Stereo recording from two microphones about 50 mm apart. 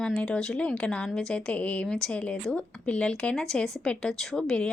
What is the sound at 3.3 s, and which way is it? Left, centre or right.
Speech, centre.